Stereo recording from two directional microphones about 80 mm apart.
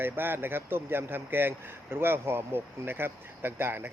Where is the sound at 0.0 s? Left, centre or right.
Right.